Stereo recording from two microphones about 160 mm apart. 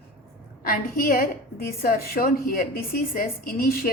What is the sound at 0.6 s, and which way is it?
A woman's voice, 60° left (ahead or behind).